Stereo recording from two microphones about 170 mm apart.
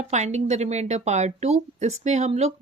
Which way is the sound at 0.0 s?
45° right (ahead or behind).